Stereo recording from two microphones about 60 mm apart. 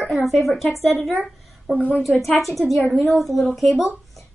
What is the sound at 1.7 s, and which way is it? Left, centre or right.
Speech, left.